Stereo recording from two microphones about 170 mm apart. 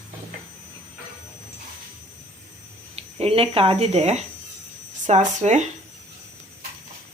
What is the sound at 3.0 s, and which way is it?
Speech, 35° right (ahead or behind).